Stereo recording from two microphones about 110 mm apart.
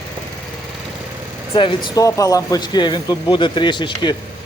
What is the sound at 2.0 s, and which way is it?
Speech, 30° left (ahead or behind).